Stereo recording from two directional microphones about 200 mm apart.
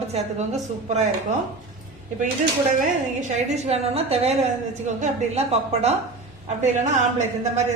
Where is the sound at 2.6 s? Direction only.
40° right (ahead or behind).